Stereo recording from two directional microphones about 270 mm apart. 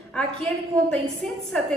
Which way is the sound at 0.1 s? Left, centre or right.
Centre.